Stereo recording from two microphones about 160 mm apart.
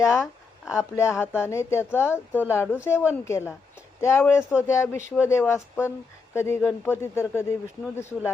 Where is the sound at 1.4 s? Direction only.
15° left (ahead or behind).